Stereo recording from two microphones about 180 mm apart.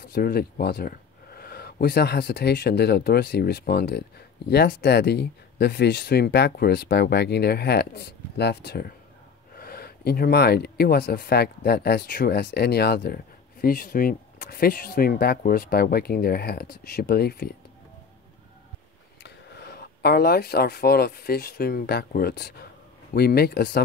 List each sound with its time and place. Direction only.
0.0 s speech: 55° left (ahead or behind)
19.2 s speech: 65° left (ahead or behind)